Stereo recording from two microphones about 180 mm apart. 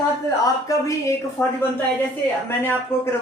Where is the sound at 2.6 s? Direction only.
15° left (ahead or behind).